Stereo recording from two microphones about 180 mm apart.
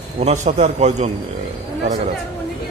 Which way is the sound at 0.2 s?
40° right (ahead or behind).